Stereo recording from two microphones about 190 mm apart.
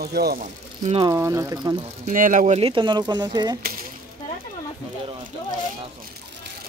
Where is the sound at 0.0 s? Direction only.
55° right (ahead or behind).